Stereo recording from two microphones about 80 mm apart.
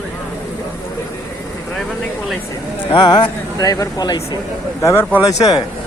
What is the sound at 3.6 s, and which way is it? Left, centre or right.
Speech, left.